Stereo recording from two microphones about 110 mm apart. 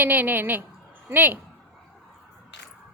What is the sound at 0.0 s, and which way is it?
A woman's voice, 15° right (ahead or behind).